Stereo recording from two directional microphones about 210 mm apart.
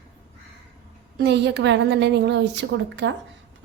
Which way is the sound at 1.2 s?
55° right (ahead or behind).